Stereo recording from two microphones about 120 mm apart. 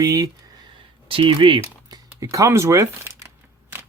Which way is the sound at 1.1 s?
45° right (ahead or behind).